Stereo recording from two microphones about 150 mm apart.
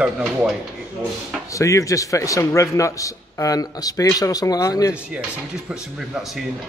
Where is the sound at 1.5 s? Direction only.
20° left (ahead or behind).